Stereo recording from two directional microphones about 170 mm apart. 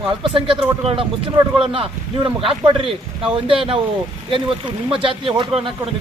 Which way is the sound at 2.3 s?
30° right (ahead or behind).